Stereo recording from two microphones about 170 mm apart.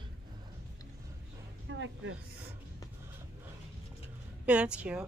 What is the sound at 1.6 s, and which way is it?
Speech, 90° right.